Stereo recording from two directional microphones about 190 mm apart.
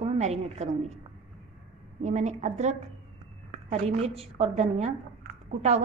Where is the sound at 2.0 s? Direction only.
35° right (ahead or behind).